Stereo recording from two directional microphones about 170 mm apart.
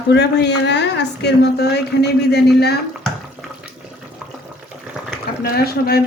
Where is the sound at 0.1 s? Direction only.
85° left.